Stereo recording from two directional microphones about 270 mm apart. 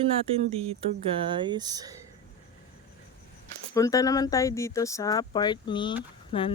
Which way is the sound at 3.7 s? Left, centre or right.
Centre.